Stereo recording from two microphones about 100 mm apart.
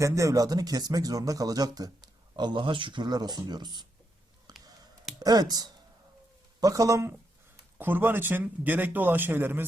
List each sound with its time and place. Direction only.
0.0 s speech: 30° right (ahead or behind); by 3.8 s 45° right (ahead or behind)
5.2 s speech: 40° right (ahead or behind); by 9.6 s 20° right (ahead or behind)